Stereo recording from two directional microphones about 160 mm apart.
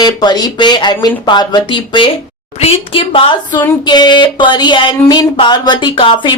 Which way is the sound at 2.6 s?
35° left (ahead or behind).